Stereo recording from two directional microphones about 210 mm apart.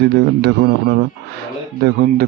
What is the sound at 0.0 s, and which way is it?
A man's voice, 55° right (ahead or behind).